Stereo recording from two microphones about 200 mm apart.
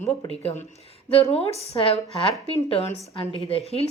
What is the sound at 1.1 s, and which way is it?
A woman's voice, 30° left (ahead or behind).